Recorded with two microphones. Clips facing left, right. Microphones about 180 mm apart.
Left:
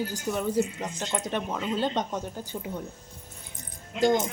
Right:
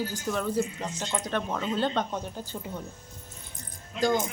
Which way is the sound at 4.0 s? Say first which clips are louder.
Left 3 dB; 20° left (ahead or behind).